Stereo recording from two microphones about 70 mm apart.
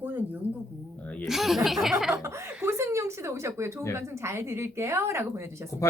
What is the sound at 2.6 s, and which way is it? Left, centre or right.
A woman's voice, right.